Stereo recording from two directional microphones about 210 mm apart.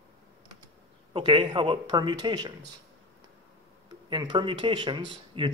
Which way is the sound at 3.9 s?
20° right (ahead or behind).